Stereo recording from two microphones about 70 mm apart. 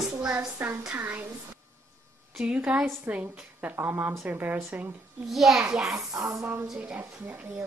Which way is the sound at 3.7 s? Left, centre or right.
Right.